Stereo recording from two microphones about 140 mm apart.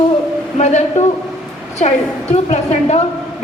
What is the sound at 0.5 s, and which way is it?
Speech, 55° left (ahead or behind).